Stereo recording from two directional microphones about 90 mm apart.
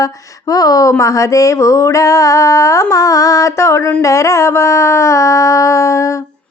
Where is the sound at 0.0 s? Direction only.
40° left (ahead or behind).